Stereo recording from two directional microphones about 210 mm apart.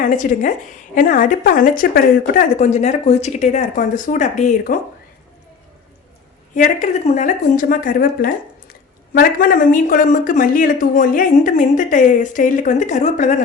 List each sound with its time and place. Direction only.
0.0 s speech: 40° left (ahead or behind)
6.5 s speech: 35° left (ahead or behind)